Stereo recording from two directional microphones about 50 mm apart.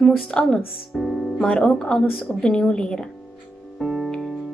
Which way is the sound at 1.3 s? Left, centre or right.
Centre.